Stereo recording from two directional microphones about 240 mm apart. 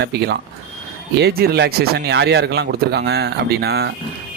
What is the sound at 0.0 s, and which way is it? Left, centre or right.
Speech, right.